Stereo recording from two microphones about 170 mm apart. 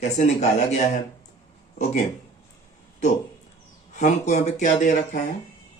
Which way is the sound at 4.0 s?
45° left (ahead or behind).